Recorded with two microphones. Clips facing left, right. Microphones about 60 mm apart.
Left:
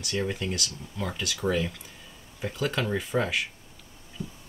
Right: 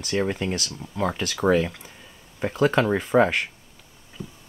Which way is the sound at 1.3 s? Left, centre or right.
Right.